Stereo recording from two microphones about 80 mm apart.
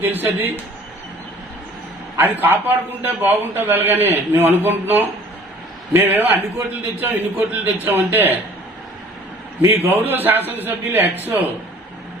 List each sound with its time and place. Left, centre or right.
0.0 s a man's voice: right
2.1 s a man's voice: right
9.6 s a man's voice: right